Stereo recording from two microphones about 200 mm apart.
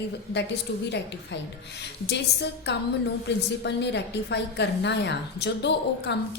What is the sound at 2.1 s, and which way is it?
A woman's voice, 60° left (ahead or behind).